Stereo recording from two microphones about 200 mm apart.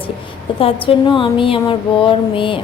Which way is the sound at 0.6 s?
25° left (ahead or behind).